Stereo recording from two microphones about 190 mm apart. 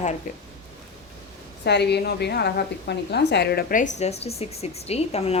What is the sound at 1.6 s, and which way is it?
A woman's voice, 60° left (ahead or behind).